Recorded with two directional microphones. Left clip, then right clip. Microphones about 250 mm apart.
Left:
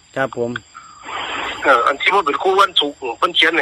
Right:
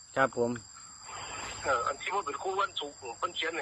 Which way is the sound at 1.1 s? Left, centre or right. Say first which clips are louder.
Left 17 dB; left.